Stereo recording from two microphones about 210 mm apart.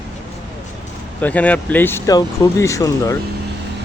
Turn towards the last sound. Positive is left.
turn(degrees=15)  # may be behind; listen again after turning